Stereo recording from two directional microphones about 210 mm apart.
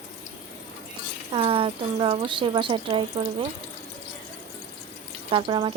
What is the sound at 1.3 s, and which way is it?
Speech, 25° right (ahead or behind).